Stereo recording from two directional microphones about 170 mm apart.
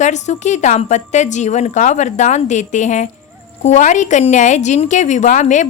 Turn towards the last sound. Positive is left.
turn(degrees=45)  # may be behind; listen again after turning